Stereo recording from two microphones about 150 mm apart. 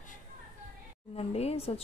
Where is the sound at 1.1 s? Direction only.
45° left (ahead or behind).